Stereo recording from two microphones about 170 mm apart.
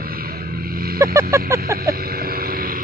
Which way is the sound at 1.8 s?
60° right (ahead or behind).